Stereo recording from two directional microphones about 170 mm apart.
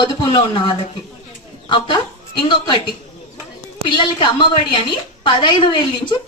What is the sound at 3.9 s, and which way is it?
A woman's voice, 30° left (ahead or behind).